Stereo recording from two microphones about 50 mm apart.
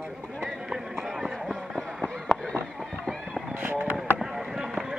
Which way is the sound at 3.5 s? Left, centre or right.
Right.